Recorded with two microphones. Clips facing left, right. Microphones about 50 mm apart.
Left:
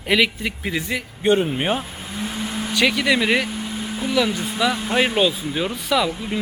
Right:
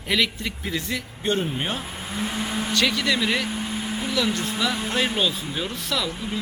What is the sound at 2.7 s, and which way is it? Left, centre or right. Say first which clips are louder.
Speech: left 5 dB; centre.